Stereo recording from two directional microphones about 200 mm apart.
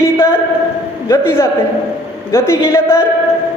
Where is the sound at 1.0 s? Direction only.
15° left (ahead or behind).